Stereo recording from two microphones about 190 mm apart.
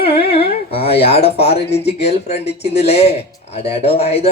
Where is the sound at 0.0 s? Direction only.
30° left (ahead or behind).